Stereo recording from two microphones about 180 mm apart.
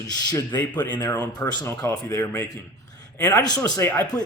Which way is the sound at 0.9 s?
20° left (ahead or behind).